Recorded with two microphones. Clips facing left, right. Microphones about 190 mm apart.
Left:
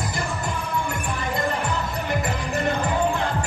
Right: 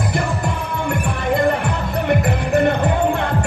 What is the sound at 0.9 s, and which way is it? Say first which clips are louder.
Music: right 8 dB; 60° right (ahead or behind).